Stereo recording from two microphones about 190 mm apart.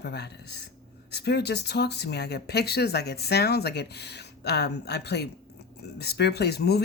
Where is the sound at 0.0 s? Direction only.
60° left (ahead or behind).